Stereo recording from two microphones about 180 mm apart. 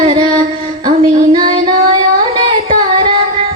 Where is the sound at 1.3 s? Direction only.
30° right (ahead or behind).